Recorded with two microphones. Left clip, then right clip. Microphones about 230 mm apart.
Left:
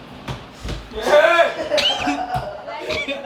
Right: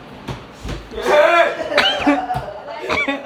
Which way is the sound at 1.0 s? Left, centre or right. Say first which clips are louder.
Right 1 dB; centre.